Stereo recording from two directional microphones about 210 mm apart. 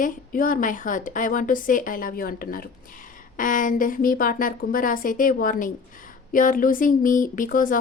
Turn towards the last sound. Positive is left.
turn(degrees=40)  # may be behind; listen again after turning